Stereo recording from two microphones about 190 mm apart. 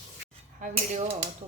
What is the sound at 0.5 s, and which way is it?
Speech, 40° right (ahead or behind).